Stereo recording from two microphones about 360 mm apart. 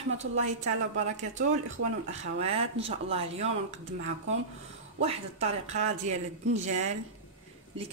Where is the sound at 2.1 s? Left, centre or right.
Centre.